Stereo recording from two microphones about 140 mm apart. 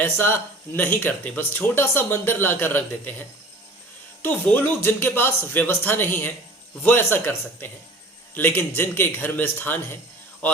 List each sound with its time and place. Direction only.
0.0 s speech: 15° left (ahead or behind)